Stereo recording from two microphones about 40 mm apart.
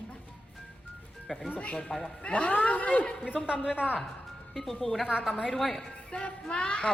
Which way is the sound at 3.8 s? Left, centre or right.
Left.